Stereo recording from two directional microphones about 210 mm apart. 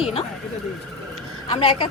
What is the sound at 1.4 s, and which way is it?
Speech, 25° left (ahead or behind).